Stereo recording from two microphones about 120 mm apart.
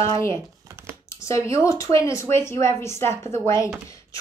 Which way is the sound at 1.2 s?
25° left (ahead or behind).